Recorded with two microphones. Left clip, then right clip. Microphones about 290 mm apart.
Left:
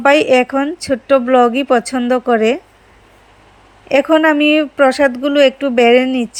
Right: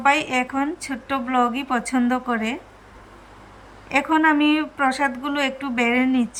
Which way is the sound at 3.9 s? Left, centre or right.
Centre.